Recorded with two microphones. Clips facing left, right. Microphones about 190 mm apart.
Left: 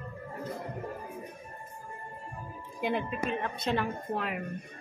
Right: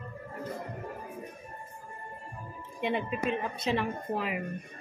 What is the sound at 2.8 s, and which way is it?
A woman's voice, centre (ahead or behind).